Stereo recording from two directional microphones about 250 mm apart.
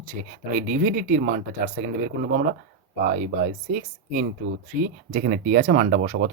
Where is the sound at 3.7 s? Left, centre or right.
Right.